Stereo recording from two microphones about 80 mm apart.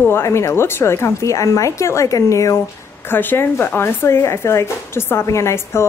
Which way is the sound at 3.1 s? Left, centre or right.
Left.